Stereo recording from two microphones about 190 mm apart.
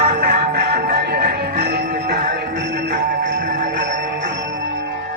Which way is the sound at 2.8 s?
60° right (ahead or behind).